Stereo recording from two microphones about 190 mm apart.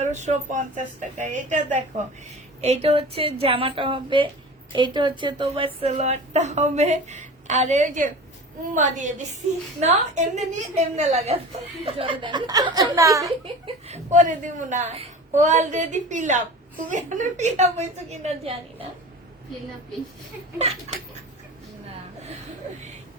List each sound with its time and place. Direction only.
0.0 s a woman's voice: 40° right (ahead or behind); by 13.3 s 15° right (ahead or behind)
13.4 s a woman's voice: 35° right (ahead or behind)